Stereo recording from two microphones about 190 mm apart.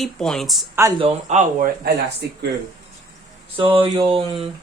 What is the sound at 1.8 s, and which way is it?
Speech, 60° right (ahead or behind).